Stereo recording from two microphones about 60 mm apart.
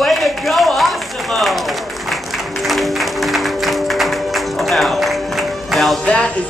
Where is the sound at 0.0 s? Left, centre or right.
Centre.